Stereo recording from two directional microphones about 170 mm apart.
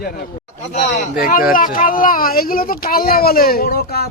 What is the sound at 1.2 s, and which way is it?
Speech, 60° left (ahead or behind).